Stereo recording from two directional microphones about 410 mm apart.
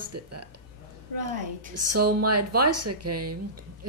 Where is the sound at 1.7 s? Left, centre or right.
Right.